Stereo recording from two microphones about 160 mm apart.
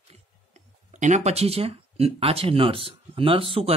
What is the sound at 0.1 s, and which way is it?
Speech, 45° right (ahead or behind).